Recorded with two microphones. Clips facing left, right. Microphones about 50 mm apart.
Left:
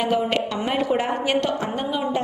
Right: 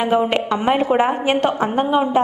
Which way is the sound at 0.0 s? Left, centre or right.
Right.